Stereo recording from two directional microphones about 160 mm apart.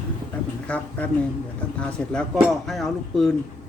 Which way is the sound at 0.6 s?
10° left (ahead or behind).